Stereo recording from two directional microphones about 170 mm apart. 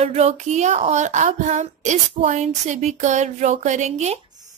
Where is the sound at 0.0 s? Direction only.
40° right (ahead or behind).